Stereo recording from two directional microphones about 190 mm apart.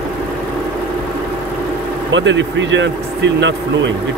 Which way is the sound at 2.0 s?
75° right (ahead or behind).